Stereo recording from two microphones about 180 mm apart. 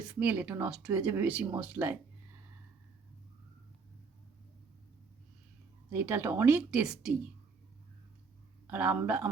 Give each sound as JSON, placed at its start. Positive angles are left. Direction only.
{"t": 0.0, "sound": "speech", "side_deg": -5}
{"t": 5.9, "sound": "speech", "side_deg": -10}
{"t": 8.6, "sound": "speech", "side_deg": -10}